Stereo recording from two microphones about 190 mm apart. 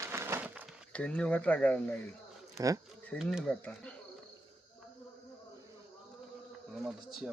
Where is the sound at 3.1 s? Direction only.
Centre (ahead or behind).